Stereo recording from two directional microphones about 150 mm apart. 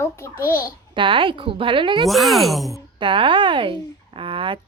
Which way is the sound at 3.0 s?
35° right (ahead or behind).